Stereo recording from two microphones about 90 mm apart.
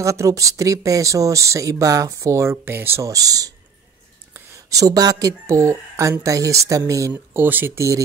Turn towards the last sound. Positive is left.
turn(degrees=-20)  # may be behind; listen again after turning